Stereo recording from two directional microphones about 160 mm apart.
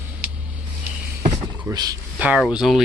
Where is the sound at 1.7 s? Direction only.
25° right (ahead or behind).